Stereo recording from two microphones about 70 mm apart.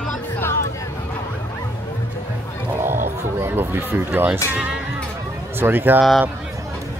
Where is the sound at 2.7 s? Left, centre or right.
Right.